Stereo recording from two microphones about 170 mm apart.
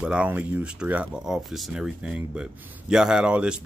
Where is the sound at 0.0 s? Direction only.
5° right (ahead or behind).